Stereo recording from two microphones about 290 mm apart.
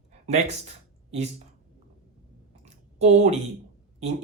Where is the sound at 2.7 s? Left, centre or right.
Right.